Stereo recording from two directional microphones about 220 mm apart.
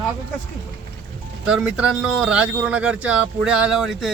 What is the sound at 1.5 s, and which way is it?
Speech, 5° right (ahead or behind).